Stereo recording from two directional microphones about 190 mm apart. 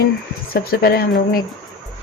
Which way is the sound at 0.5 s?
50° left (ahead or behind).